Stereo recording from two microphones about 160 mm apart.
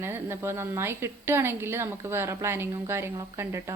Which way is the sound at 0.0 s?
15° right (ahead or behind).